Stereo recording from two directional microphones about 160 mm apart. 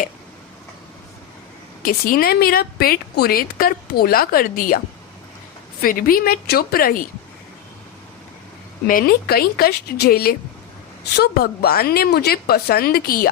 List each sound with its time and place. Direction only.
1.8 s a woman's voice: 65° left (ahead or behind)
5.8 s a woman's voice: 65° left (ahead or behind)
8.9 s a woman's voice: 65° left (ahead or behind)